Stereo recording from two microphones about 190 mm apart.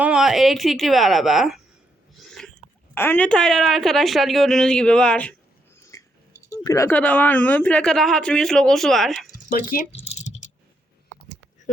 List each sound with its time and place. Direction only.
0.0 s a woman's voice: 5° right (ahead or behind)
2.2 s a sound: centre (ahead or behind)
2.9 s a woman's voice: 10° left (ahead or behind)
5.9 s speech: 15° left (ahead or behind); by 9.2 s centre (ahead or behind)
9.5 s speech: 45° left (ahead or behind)
10.0 s typing: 35° left (ahead or behind)